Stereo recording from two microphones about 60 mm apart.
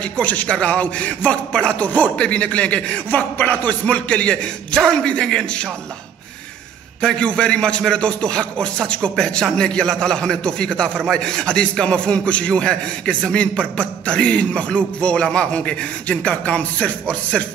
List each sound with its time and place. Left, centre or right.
0.2 s a man's voice: left
7.0 s a man's voice: centre